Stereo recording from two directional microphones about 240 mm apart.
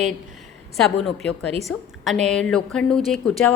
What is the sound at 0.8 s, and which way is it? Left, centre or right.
A woman's voice, centre.